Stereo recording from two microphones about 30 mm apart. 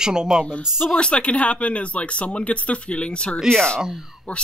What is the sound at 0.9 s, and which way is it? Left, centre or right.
Speech, left.